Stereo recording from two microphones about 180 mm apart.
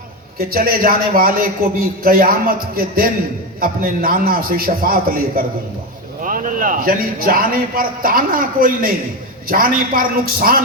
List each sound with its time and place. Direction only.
0.3 s a man's voice: 55° right (ahead or behind)